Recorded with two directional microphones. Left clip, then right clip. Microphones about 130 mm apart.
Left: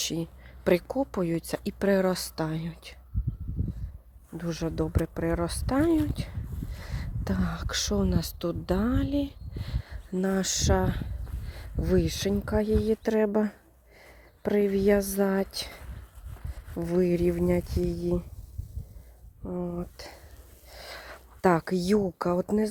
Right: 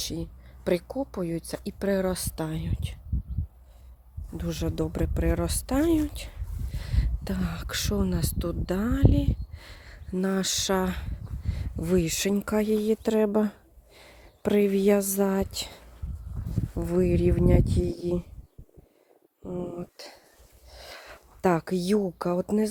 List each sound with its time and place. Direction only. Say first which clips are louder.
0.0 s speech: left 2 dB; 20° left (ahead or behind)
4.3 s speech: even; 10° right (ahead or behind)
6.1 s a sound: left 1 dB; 15° right (ahead or behind)
6.7 s speech: right 5 dB; centre (ahead or behind); by 11.1 s 20° right (ahead or behind)
11.4 s speech: even; 10° right (ahead or behind)
13.9 s speech: right 2 dB; 35° right (ahead or behind); by 18.2 s 15° right (ahead or behind)
19.5 s speech: even; 30° right (ahead or behind)
20.0 s a sound: even; 5° right (ahead or behind)